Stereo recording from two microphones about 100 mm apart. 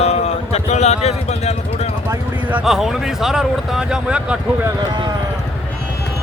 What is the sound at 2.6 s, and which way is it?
Speech, 5° right (ahead or behind).